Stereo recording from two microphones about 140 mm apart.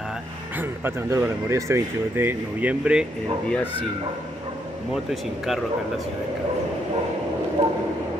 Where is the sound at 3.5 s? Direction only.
10° left (ahead or behind).